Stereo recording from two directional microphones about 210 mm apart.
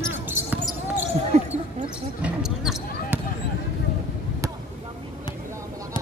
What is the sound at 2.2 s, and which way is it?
Basketball bounce, 5° right (ahead or behind).